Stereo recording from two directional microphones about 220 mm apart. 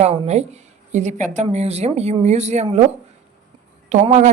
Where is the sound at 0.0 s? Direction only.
30° right (ahead or behind).